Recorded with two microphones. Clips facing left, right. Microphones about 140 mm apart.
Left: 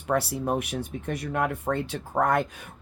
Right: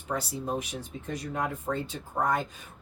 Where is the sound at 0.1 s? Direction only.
65° left (ahead or behind).